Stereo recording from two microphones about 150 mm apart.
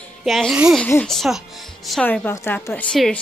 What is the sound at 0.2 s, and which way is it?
Speech, centre (ahead or behind).